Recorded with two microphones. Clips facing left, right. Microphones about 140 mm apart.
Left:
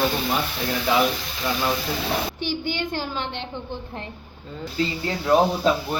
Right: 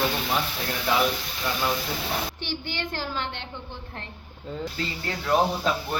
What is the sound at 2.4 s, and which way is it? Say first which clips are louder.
Speech: left 6 dB; 15° left (ahead or behind).